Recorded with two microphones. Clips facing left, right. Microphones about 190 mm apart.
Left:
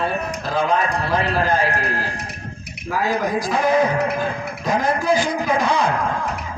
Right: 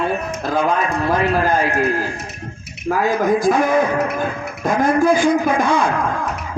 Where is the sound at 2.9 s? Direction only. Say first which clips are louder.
Right 4 dB; 50° right (ahead or behind).